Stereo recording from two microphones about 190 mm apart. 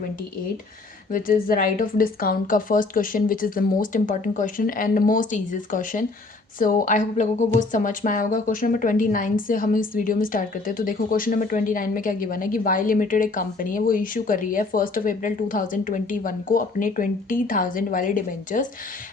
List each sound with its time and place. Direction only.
1.1 s speech: 45° left (ahead or behind)